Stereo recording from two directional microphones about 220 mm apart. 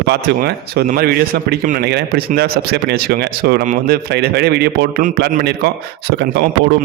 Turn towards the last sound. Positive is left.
turn(degrees=-50)  # may be behind; listen again after turning